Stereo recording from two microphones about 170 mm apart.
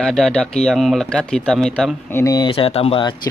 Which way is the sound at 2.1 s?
20° left (ahead or behind).